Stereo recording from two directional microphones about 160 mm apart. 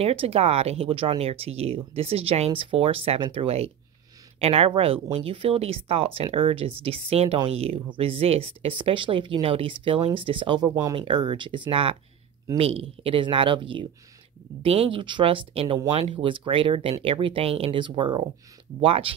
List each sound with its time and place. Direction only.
0.0 s speech: 35° right (ahead or behind)
10.7 s speech: 20° right (ahead or behind)
11.1 s speech: 30° right (ahead or behind)